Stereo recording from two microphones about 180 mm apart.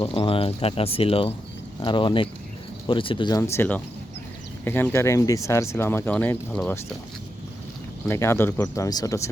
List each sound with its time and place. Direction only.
0.0 s speech: 30° left (ahead or behind); by 6.7 s 10° left (ahead or behind)
8.0 s speech: 15° left (ahead or behind)